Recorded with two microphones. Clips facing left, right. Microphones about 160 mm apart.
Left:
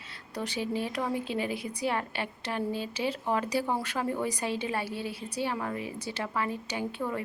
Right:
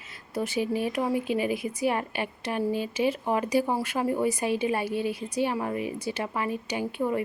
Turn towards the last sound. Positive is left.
turn(degrees=-15)  # may be behind; listen again after turning